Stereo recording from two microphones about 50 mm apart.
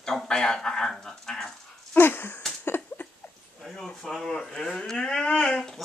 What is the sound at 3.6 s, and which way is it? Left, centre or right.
Speech, centre.